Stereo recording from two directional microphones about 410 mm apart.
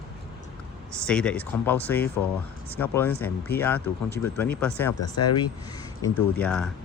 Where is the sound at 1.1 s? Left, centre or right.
Centre.